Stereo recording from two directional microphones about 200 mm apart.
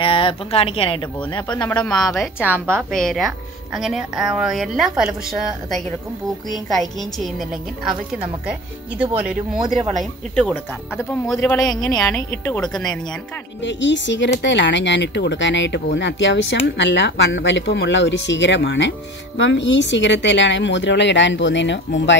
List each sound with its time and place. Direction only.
0.0 s speech: 25° left (ahead or behind)
1.9 s speech: centre (ahead or behind)
10.3 s speech: 5° left (ahead or behind)
13.6 s speech: 65° left (ahead or behind)